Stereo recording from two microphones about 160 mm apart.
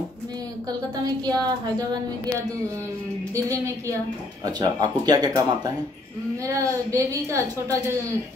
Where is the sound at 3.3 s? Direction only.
20° right (ahead or behind).